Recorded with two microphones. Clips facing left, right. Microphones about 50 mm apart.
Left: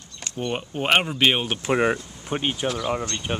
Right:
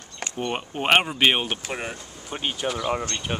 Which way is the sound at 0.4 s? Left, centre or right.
Centre.